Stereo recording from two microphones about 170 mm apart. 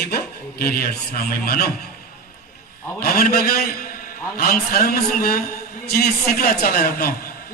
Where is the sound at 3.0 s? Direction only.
60° left (ahead or behind).